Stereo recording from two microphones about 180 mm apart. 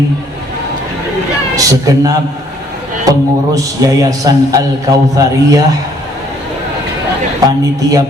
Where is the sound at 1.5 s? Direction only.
20° right (ahead or behind).